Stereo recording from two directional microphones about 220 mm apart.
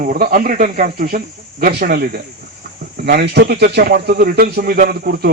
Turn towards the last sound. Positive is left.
turn(degrees=-45)  # may be behind; listen again after turning